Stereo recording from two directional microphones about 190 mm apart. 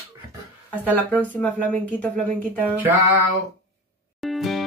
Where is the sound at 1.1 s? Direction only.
10° left (ahead or behind).